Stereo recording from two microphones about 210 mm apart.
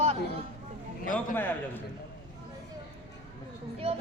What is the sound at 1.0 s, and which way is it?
Speech, 40° left (ahead or behind).